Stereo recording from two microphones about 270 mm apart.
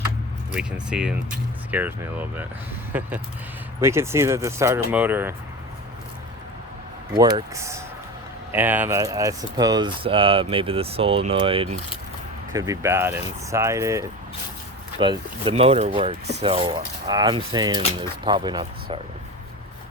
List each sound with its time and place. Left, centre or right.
0.5 s speech: centre
7.1 s speech: centre